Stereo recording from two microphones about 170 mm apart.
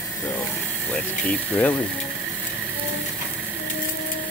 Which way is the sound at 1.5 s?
10° left (ahead or behind).